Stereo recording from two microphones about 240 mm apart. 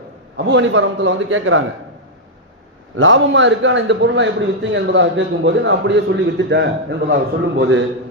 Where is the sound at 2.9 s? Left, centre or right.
Right.